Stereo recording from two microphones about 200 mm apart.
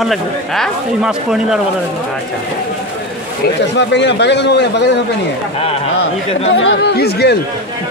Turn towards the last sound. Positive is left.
turn(degrees=55)  # may be behind; listen again after turning